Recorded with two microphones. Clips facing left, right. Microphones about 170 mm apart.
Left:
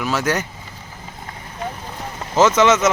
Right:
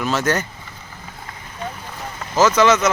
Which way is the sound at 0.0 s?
10° left (ahead or behind).